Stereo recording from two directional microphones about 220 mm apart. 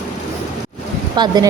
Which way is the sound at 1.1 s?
20° right (ahead or behind).